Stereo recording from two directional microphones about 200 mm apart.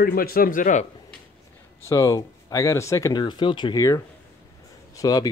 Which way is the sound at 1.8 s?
15° left (ahead or behind).